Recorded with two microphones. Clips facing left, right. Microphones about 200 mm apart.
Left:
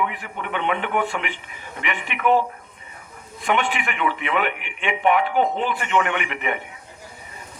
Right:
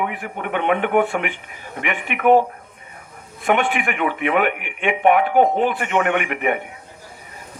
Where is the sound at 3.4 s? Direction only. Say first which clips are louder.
Right 4 dB; 50° right (ahead or behind).